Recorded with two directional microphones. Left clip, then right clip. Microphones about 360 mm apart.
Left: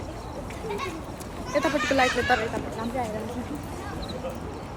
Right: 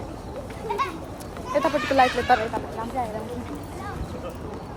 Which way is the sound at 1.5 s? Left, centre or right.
Centre.